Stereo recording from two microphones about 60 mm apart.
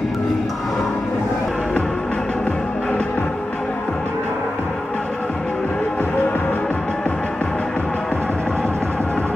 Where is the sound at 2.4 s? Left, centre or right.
Left.